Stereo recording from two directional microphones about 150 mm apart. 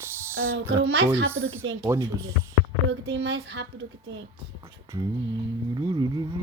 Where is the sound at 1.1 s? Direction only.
20° right (ahead or behind).